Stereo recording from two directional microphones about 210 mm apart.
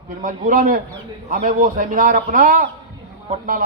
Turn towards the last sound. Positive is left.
turn(degrees=-40)  # may be behind; listen again after turning